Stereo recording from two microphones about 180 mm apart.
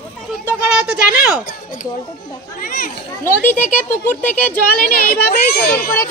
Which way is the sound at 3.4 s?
10° left (ahead or behind).